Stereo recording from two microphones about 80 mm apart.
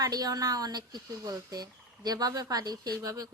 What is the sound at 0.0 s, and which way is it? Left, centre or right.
Speech, right.